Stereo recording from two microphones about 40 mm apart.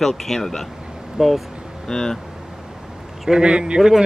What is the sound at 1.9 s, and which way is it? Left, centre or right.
Speech, centre.